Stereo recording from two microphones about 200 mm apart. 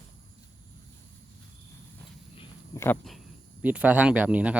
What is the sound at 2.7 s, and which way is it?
Speech, 10° left (ahead or behind).